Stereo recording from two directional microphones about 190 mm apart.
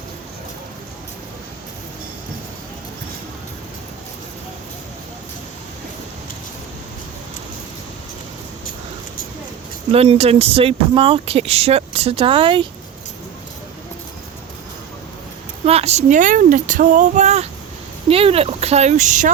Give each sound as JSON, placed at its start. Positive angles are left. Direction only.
{"t": 9.9, "sound": "speech", "side_deg": -30}
{"t": 15.6, "sound": "speech", "side_deg": -35}